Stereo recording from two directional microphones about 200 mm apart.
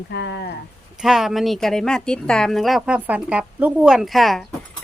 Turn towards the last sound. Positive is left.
turn(degrees=0)  # may be behind; listen again after turning